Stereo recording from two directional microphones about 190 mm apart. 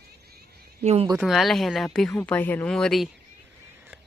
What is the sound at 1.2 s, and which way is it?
Speech, centre (ahead or behind).